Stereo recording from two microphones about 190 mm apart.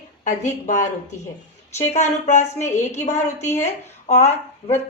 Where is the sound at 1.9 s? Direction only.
35° left (ahead or behind).